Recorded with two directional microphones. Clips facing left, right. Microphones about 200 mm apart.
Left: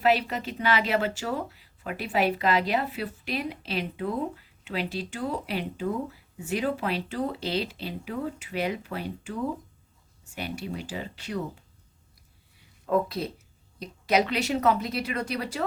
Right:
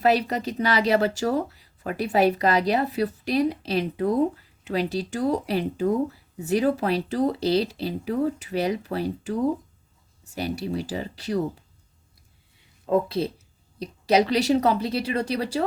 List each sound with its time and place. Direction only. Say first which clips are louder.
0.0 s speech: right 3 dB; 40° right (ahead or behind)
12.9 s speech: right 3 dB; 30° right (ahead or behind)